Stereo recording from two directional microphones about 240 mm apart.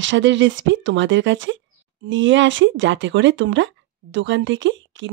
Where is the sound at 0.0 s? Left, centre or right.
Right.